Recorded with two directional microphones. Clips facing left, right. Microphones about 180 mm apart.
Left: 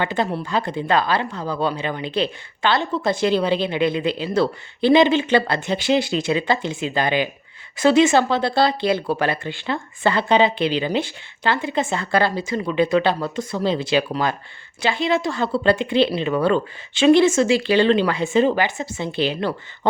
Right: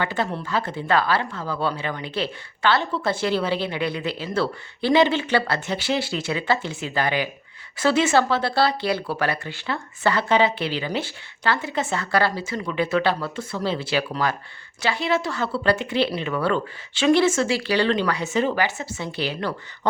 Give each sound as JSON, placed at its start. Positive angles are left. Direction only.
{"t": 0.0, "sound": "speech", "side_deg": 20}